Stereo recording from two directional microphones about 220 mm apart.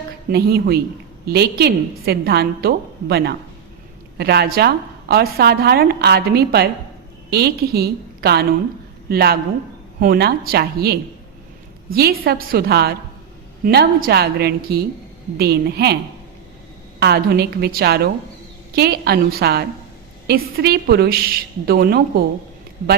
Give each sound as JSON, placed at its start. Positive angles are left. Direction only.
{"t": 0.3, "sound": "a woman's voice", "side_deg": -45}
{"t": 17.0, "sound": "a woman's voice", "side_deg": -50}